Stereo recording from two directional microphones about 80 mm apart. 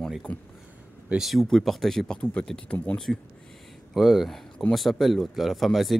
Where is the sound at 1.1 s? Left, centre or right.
Centre.